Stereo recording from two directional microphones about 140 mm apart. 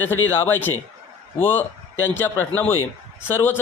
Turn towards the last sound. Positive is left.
turn(degrees=15)  # may be behind; listen again after turning